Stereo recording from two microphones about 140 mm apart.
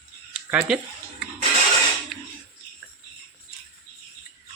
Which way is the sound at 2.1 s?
Centre (ahead or behind).